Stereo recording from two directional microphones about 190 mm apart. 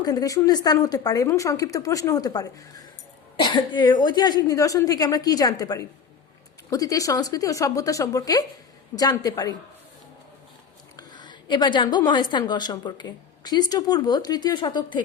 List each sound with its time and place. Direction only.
0.0 s a woman's voice: 20° left (ahead or behind)
10.9 s a woman's voice: 20° left (ahead or behind)